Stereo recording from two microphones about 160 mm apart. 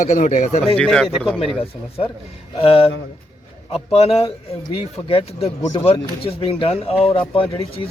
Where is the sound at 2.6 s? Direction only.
35° left (ahead or behind).